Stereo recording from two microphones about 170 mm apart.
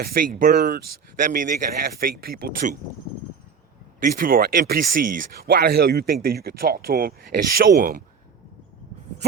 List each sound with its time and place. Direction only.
0.0 s speech: 60° right (ahead or behind)
4.0 s speech: 55° right (ahead or behind)